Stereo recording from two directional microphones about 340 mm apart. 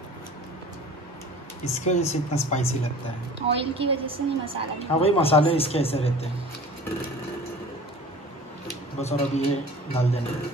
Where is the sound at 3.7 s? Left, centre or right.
Centre.